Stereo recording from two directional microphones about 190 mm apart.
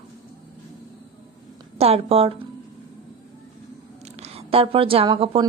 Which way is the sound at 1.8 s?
30° right (ahead or behind).